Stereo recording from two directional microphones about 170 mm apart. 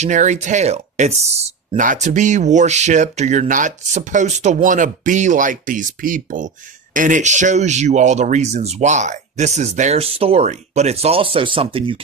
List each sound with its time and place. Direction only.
0.0 s speech: 45° right (ahead or behind)